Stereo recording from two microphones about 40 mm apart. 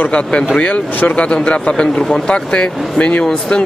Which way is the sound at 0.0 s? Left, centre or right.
Left.